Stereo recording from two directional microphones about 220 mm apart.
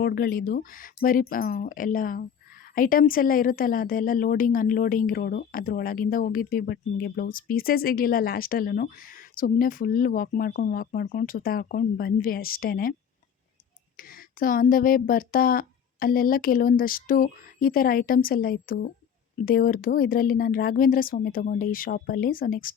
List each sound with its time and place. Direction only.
0.0 s a woman's voice: 45° left (ahead or behind)
13.9 s a woman's voice: 40° left (ahead or behind)